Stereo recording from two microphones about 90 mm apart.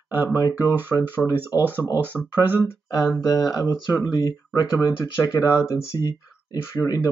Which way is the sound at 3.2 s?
40° left (ahead or behind).